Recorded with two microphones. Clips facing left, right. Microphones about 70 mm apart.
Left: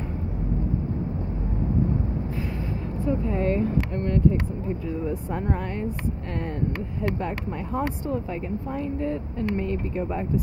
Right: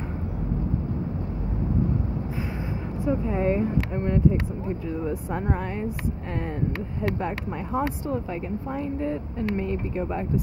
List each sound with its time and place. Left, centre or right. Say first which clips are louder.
3.1 s speech: right 1 dB; centre
7.0 s speech: right 1 dB; centre